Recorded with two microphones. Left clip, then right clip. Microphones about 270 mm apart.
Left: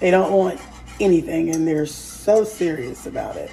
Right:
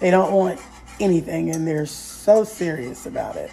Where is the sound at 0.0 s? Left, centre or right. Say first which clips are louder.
Left 1 dB; right.